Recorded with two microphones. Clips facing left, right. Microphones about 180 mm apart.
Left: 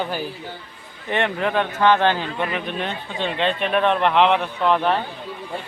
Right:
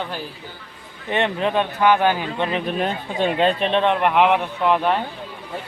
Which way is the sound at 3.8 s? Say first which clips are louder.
Left 1 dB; 15° right (ahead or behind).